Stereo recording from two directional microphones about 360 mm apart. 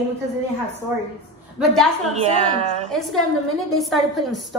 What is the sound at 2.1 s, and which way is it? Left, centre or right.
Speech, centre.